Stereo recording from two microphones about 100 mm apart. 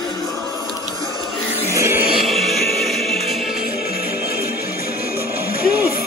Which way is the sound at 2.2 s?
Centre (ahead or behind).